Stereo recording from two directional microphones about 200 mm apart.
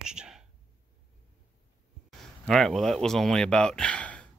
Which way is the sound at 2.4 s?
Centre (ahead or behind).